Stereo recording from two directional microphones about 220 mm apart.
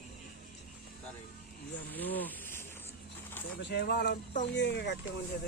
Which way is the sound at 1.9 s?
10° left (ahead or behind).